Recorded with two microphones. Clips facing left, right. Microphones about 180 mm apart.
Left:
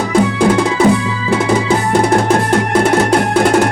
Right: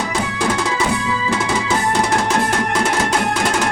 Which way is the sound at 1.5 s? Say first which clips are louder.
Left 5 dB; 55° left (ahead or behind).